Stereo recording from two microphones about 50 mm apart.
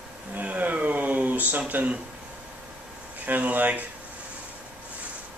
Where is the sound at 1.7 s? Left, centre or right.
Right.